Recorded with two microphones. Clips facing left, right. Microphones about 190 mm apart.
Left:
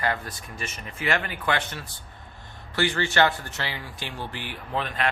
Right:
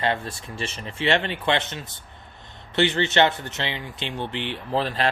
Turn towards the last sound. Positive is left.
turn(degrees=-30)  # may be behind; listen again after turning